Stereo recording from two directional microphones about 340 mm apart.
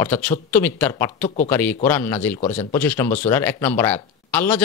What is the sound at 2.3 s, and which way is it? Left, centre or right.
Speech, centre.